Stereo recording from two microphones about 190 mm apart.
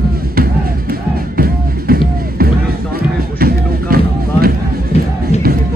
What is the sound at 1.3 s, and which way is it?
Music, 50° right (ahead or behind).